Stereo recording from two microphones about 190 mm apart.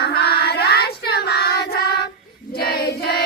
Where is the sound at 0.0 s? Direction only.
60° left (ahead or behind).